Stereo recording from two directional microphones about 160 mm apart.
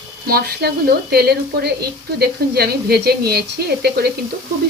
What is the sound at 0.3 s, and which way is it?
A woman's voice, 75° right (ahead or behind).